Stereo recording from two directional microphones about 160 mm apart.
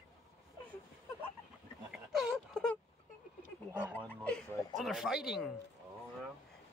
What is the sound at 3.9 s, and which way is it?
Speech, 10° left (ahead or behind).